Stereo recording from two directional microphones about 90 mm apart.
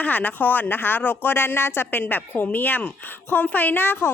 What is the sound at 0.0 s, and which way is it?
Speech, 20° left (ahead or behind).